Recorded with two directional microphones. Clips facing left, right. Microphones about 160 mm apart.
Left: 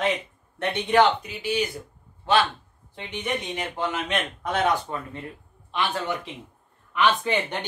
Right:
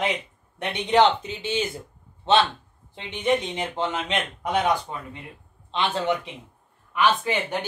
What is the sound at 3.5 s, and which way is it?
Speech, 25° right (ahead or behind).